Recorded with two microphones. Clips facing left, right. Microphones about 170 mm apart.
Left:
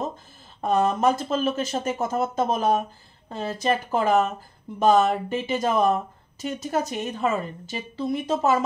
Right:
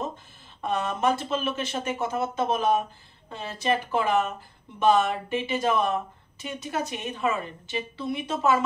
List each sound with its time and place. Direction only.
0.6 s a woman's voice: 40° left (ahead or behind)